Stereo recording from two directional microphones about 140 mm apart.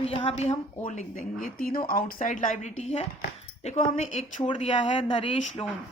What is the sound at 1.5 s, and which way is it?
A woman's voice, 90° left.